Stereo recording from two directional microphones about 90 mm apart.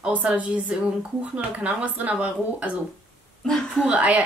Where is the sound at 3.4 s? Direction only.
5° left (ahead or behind).